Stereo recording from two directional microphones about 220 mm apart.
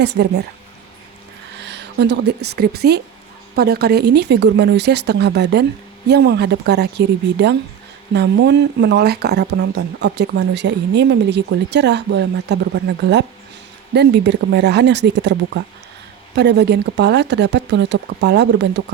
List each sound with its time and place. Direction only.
0.2 s speech: 50° right (ahead or behind)
1.6 s a sound: 50° right (ahead or behind)
2.6 s speech: 45° right (ahead or behind)